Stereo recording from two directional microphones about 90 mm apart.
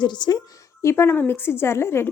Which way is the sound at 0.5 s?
30° left (ahead or behind).